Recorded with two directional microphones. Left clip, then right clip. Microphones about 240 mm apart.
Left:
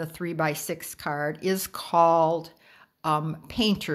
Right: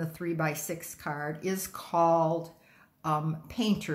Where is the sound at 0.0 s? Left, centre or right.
Left.